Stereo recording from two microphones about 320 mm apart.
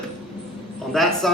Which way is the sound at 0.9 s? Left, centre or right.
Centre.